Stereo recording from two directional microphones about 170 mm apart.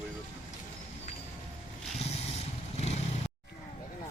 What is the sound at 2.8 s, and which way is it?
Vehicle, 40° left (ahead or behind).